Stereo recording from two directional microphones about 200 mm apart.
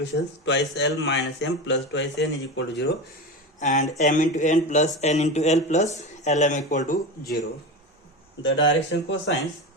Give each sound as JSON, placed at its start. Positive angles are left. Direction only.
{"t": 0.0, "sound": "speech", "side_deg": 60}
{"t": 3.6, "sound": "speech", "side_deg": 40}
{"t": 8.4, "sound": "speech", "side_deg": 65}